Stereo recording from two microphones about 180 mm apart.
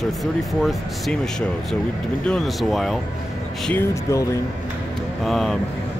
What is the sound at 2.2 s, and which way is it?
Speech, centre (ahead or behind).